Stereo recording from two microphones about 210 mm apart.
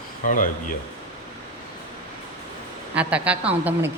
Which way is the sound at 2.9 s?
5° right (ahead or behind).